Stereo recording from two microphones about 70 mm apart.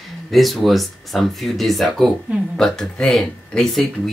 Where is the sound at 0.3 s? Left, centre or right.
Centre.